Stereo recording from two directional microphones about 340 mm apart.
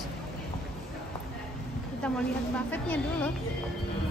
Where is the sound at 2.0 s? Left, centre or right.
Centre.